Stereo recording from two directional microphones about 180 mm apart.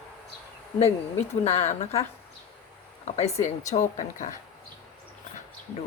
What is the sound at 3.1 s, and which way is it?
Speech, 35° left (ahead or behind).